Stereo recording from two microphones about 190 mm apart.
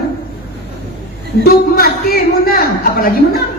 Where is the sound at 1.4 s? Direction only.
50° left (ahead or behind).